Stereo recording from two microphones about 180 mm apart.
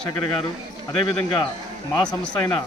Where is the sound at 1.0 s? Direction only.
25° left (ahead or behind).